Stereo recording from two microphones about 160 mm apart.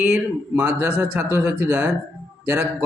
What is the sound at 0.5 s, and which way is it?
Speech, 15° right (ahead or behind).